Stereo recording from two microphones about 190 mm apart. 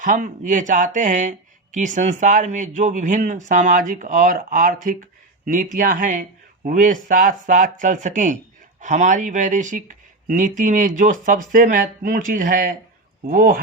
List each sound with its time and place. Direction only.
0.0 s speech: 45° right (ahead or behind)